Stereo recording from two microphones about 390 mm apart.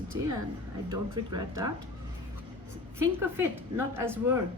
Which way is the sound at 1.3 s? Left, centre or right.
Centre.